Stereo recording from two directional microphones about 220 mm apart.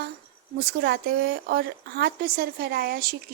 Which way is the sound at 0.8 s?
45° right (ahead or behind).